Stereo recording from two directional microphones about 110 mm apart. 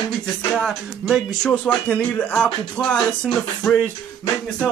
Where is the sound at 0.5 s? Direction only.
5° left (ahead or behind).